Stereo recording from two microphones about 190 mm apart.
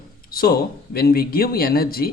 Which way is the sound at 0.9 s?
55° left (ahead or behind).